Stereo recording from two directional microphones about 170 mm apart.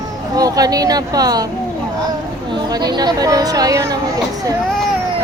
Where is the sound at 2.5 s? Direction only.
25° right (ahead or behind).